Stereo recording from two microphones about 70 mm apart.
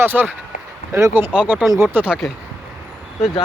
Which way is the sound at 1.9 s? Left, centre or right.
Right.